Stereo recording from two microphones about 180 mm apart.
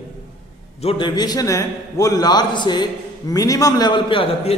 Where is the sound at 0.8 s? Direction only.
25° left (ahead or behind).